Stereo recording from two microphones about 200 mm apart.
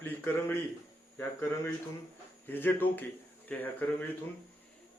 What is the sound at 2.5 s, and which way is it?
Speech, 10° left (ahead or behind).